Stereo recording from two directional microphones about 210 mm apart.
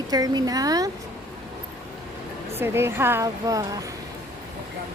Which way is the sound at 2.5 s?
10° right (ahead or behind).